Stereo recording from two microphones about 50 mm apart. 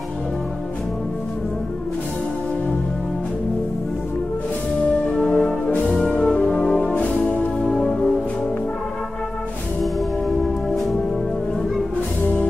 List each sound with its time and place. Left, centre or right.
5.1 s brass instrument: centre
6.8 s music: left
7.7 s music: centre